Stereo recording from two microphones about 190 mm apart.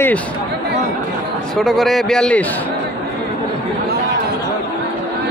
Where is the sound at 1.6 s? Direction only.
Centre (ahead or behind).